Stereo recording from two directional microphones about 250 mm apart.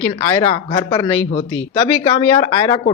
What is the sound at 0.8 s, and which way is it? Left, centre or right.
Speech, centre.